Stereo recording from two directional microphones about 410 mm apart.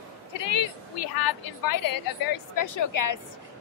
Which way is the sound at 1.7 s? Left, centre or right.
Left.